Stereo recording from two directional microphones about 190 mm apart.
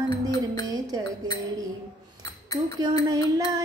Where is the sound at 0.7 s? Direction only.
20° right (ahead or behind).